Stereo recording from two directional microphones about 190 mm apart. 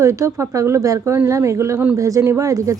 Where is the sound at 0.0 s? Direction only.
15° right (ahead or behind).